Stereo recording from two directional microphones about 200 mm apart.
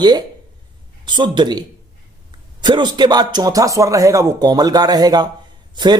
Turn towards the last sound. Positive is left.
turn(degrees=-20)  # may be behind; listen again after turning